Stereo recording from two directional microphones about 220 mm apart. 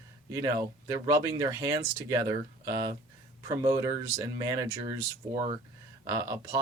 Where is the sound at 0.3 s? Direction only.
15° right (ahead or behind).